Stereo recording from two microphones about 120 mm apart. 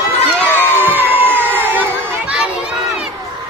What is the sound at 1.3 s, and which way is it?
Crowd, 15° right (ahead or behind).